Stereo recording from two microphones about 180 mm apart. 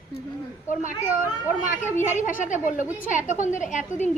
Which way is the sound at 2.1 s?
45° left (ahead or behind).